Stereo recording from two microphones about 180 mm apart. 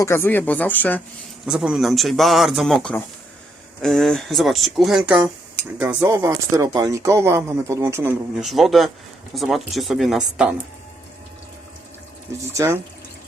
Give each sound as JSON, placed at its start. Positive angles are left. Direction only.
{"t": 0.0, "sound": "speech", "side_deg": 15}
{"t": 1.5, "sound": "speech", "side_deg": -5}
{"t": 8.4, "sound": "speech", "side_deg": 0}
{"t": 12.5, "sound": "speech", "side_deg": -15}